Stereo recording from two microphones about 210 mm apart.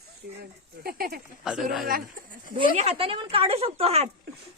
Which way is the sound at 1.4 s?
5° right (ahead or behind).